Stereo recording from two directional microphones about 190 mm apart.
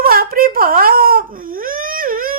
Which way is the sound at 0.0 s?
50° right (ahead or behind).